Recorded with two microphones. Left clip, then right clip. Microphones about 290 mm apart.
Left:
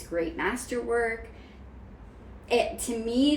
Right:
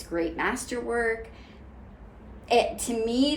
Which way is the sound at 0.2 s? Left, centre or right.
Centre.